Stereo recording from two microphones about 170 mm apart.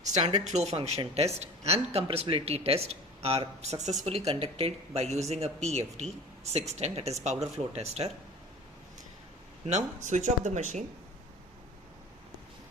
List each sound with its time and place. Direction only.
0.0 s speech: 40° right (ahead or behind)
9.6 s speech: 45° right (ahead or behind)